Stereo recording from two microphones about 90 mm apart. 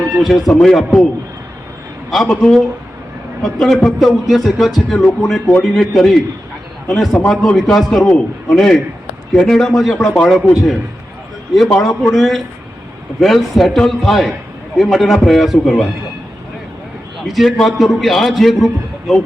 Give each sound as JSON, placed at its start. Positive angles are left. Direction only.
{"t": 0.2, "sound": "a man's voice", "side_deg": 0}
{"t": 2.0, "sound": "a man's voice", "side_deg": 5}
{"t": 11.5, "sound": "a man's voice", "side_deg": 0}
{"t": 17.2, "sound": "a man's voice", "side_deg": 0}